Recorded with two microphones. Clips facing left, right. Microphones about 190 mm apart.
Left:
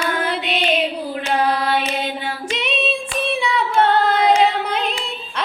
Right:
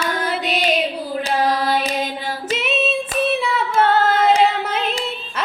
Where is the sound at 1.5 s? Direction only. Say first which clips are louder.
Even; 40° right (ahead or behind).